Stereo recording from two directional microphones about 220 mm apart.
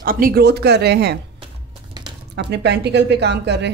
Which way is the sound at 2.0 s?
20° right (ahead or behind).